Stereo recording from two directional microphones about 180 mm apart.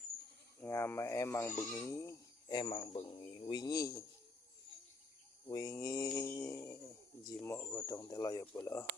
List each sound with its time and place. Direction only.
0.6 s speech: 15° left (ahead or behind)
5.5 s speech: 20° left (ahead or behind)